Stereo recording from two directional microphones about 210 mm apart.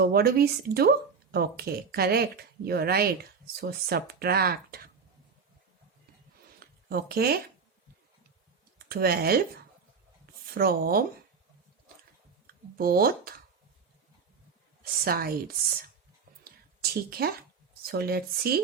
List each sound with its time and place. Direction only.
0.0 s speech: 45° right (ahead or behind)
6.6 s zipper: 45° right (ahead or behind)
8.9 s speech: 45° right (ahead or behind)
10.4 s speech: 45° right (ahead or behind)
12.7 s speech: 45° right (ahead or behind)
15.0 s speech: 45° right (ahead or behind)
16.4 s a sound: 45° right (ahead or behind)
17.8 s speech: 45° right (ahead or behind)